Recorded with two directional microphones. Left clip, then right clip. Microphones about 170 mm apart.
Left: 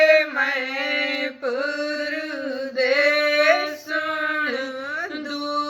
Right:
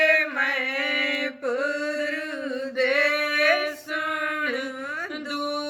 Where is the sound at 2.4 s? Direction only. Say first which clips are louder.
Left 3 dB; 25° right (ahead or behind).